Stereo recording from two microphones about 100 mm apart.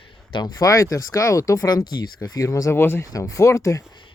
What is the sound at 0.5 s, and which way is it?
Speech, 30° left (ahead or behind).